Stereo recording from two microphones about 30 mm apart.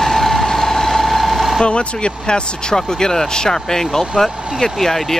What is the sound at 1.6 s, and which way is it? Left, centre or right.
Speech, left.